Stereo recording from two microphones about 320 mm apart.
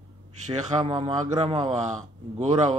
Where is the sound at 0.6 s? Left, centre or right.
Centre.